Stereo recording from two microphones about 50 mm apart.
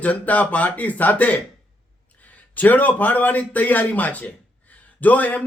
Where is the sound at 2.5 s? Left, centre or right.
Left.